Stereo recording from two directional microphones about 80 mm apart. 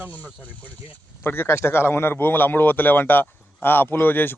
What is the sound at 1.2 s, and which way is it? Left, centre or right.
Speech, left.